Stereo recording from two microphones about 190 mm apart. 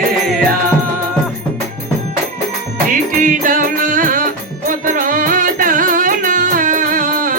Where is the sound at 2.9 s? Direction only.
45° right (ahead or behind).